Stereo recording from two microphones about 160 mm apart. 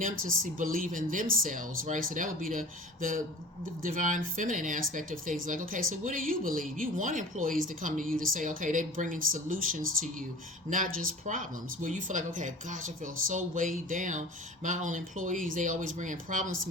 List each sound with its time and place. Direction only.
0.0 s speech: 55° right (ahead or behind)